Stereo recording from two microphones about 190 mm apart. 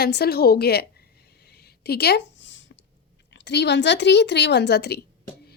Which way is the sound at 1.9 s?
60° left (ahead or behind).